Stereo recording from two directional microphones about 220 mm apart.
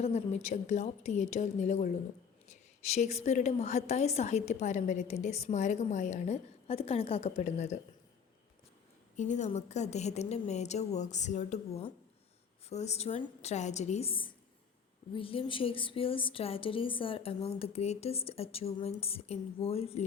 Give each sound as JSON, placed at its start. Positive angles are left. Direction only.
{"t": 0.0, "sound": "a woman's voice", "side_deg": 30}
{"t": 9.1, "sound": "a woman's voice", "side_deg": 35}